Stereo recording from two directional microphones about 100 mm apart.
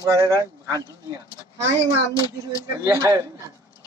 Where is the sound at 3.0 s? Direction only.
30° right (ahead or behind).